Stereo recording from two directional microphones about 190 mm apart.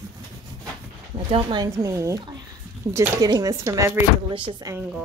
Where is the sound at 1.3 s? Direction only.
25° right (ahead or behind).